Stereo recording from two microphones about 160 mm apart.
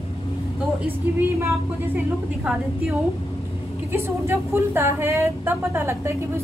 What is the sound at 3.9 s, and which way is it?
Speech, 15° right (ahead or behind).